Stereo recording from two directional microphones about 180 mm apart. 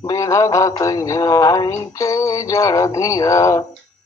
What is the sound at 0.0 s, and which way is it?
Synthetic singing, 20° left (ahead or behind).